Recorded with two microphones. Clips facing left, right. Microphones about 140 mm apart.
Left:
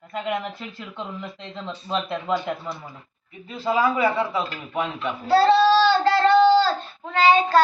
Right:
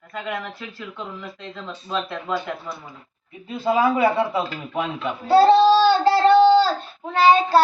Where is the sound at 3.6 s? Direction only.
20° right (ahead or behind).